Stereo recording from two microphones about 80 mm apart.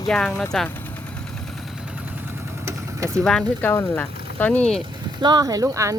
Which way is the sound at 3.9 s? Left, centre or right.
Left.